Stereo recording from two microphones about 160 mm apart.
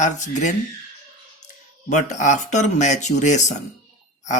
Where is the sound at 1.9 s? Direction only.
50° left (ahead or behind).